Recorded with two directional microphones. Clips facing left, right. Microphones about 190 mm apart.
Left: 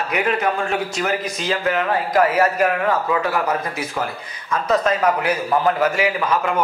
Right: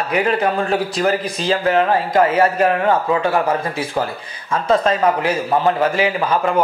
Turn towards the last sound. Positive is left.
turn(degrees=-35)  # may be behind; listen again after turning